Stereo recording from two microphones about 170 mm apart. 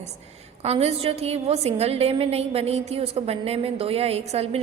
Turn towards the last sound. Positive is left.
turn(degrees=-40)  # may be behind; listen again after turning